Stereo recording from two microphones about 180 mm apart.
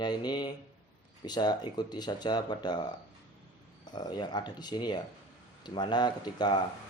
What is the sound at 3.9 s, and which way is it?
Speech, 25° left (ahead or behind).